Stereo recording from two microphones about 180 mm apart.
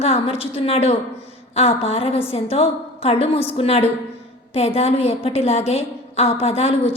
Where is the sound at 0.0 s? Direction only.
35° left (ahead or behind).